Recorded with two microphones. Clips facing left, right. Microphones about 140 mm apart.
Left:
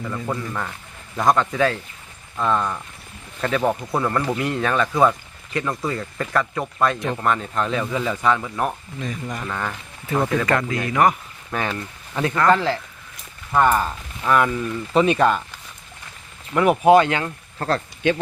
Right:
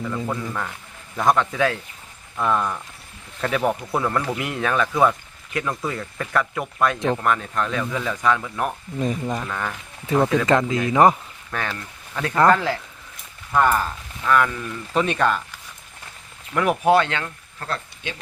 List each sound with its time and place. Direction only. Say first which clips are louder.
0.3 s speech: left 1 dB; centre (ahead or behind)
9.0 s speech: right 9 dB; 30° right (ahead or behind)
9.5 s speech: left 1 dB; centre (ahead or behind)
10.4 s speech: right 3 dB; 20° right (ahead or behind)
11.5 s speech: left 3 dB; 10° left (ahead or behind)
12.5 s speech: left 2 dB; centre (ahead or behind)
13.5 s speech: left 1 dB; 10° left (ahead or behind)
16.6 s speech: left 4 dB; 5° left (ahead or behind)
17.6 s speech: left 7 dB; 40° left (ahead or behind)
18.0 s speech: left 14 dB; 55° left (ahead or behind)